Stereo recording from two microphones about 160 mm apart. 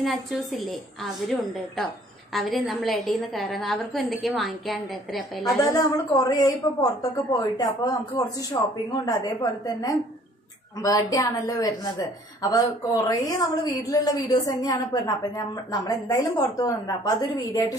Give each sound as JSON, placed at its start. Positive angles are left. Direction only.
{"t": 0.0, "sound": "a woman's voice", "side_deg": 0}
{"t": 2.3, "sound": "a woman's voice", "side_deg": 0}
{"t": 5.4, "sound": "a woman's voice", "side_deg": 20}